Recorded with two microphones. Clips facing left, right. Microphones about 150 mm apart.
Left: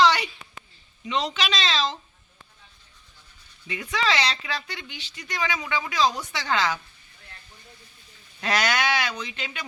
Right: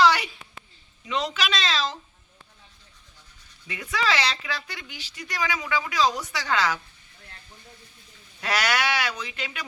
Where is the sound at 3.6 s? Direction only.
Centre (ahead or behind).